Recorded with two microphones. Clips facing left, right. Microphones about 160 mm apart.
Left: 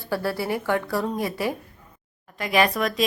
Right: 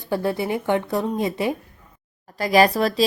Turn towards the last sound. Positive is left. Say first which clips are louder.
# right 5 dB
turn(degrees=-30)  # may be behind; listen again after turning